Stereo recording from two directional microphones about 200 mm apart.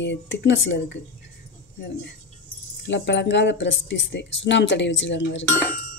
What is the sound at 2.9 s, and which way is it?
Speech, 60° left (ahead or behind).